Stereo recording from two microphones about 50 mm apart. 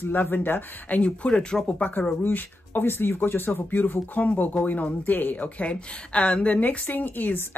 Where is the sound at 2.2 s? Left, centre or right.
Left.